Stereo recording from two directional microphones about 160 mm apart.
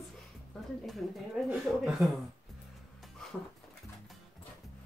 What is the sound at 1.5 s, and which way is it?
Speech, centre (ahead or behind).